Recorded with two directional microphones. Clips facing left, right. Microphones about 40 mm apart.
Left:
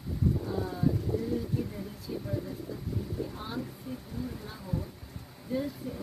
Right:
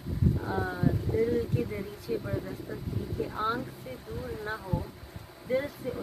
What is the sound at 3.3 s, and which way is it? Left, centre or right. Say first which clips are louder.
Speech: right 9 dB; right.